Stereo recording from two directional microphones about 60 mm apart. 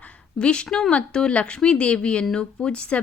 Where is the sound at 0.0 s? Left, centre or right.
Centre.